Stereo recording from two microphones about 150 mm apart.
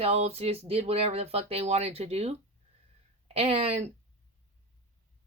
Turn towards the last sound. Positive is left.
turn(degrees=-45)  # may be behind; listen again after turning